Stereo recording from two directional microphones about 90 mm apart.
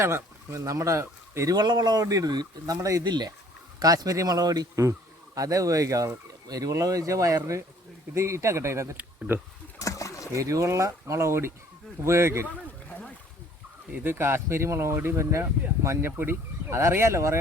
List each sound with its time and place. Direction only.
0.0 s speech: 30° right (ahead or behind)
1.5 s speech: 50° right (ahead or behind)
3.0 s speech: 50° right (ahead or behind)
3.8 s speech: 40° right (ahead or behind); by 9.4 s 25° right (ahead or behind)
9.8 s rowboat: 35° left (ahead or behind)
10.3 s speech: 35° right (ahead or behind)
13.9 s speech: 25° right (ahead or behind)